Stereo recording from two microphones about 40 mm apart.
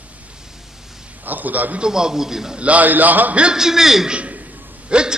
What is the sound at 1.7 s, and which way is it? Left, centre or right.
Speech, centre.